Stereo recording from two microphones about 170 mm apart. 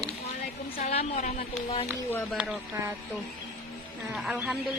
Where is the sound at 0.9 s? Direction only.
40° left (ahead or behind).